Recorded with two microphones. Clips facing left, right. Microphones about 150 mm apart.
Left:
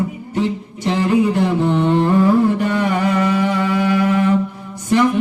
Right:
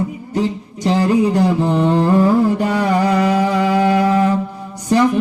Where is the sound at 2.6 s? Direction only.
35° right (ahead or behind).